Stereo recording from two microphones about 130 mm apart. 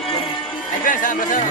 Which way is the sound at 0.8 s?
90° left.